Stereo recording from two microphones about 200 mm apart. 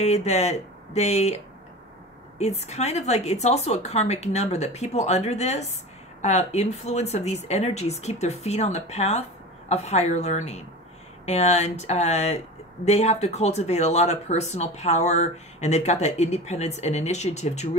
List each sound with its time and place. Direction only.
0.0 s speech: 35° left (ahead or behind)